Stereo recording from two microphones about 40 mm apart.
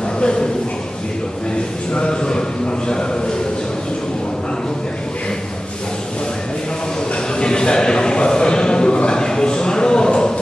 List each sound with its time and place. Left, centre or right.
0.2 s speech: left
2.0 s a man's voice: centre
7.3 s a sound: left